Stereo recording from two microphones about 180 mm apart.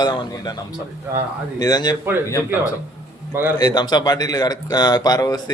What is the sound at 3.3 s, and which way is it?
Speech, 10° right (ahead or behind).